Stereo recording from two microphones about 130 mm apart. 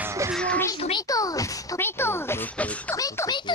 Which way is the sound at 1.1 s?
25° left (ahead or behind).